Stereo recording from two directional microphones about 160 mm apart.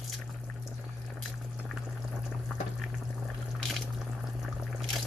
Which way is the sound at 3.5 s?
Centre (ahead or behind).